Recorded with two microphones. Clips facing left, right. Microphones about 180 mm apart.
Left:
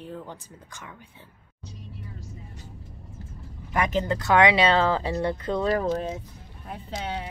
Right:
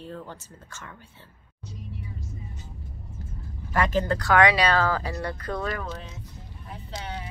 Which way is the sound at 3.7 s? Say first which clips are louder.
Right 1 dB; 20° left (ahead or behind).